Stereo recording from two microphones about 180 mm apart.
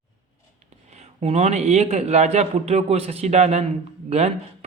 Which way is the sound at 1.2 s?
35° right (ahead or behind).